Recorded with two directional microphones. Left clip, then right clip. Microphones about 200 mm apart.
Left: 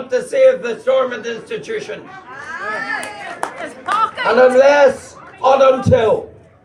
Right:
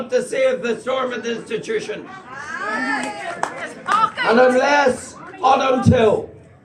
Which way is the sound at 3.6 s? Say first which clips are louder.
Left 1 dB; 35° left (ahead or behind).